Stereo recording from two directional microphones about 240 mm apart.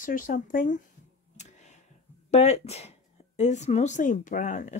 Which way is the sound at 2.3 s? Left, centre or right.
Left.